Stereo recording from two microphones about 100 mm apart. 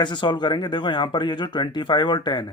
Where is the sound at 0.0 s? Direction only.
50° left (ahead or behind).